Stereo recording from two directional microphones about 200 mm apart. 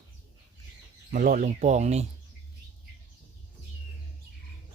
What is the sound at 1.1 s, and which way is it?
Speech, 40° right (ahead or behind).